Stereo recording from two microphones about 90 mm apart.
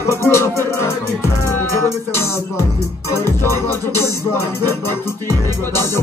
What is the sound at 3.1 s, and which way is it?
Music, 30° left (ahead or behind).